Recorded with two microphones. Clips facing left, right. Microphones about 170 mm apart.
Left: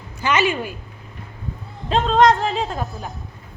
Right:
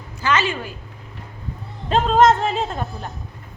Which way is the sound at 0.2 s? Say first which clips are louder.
Left 2 dB; 15° left (ahead or behind).